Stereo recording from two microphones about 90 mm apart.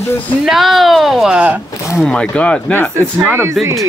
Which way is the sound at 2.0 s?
10° left (ahead or behind).